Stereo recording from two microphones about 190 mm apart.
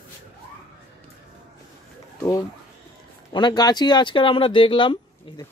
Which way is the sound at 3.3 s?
20° left (ahead or behind).